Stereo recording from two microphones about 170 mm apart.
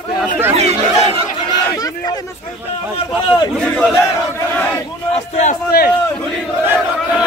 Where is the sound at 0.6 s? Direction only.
40° right (ahead or behind).